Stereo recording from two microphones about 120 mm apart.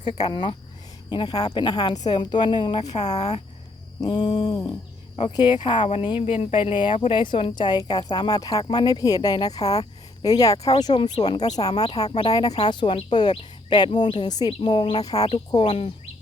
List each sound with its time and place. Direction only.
0.2 s a woman's voice: 40° left (ahead or behind)
3.0 s speech: 70° left (ahead or behind)
4.0 s a woman's voice: 35° left (ahead or behind)
12.0 s speech: 60° left (ahead or behind)
12.3 s a woman's voice: 35° left (ahead or behind)